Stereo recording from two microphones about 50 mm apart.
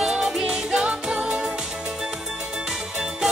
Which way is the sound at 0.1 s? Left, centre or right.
Centre.